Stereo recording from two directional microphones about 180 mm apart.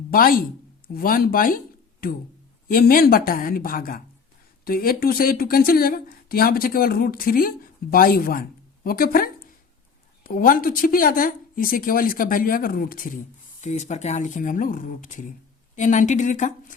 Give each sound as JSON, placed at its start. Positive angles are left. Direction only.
{"t": 0.1, "sound": "speech", "side_deg": 55}
{"t": 13.6, "sound": "speech", "side_deg": 40}